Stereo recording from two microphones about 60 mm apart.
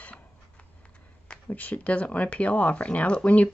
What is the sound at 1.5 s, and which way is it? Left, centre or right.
Speech, left.